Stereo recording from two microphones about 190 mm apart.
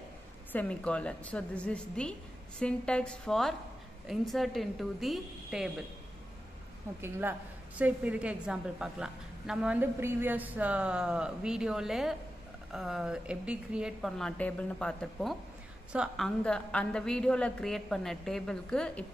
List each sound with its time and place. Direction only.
0.5 s a woman's voice: 5° left (ahead or behind)
7.0 s a woman's voice: 10° right (ahead or behind)